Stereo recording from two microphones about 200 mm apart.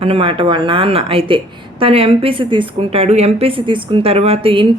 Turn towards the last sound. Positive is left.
turn(degrees=-25)  # may be behind; listen again after turning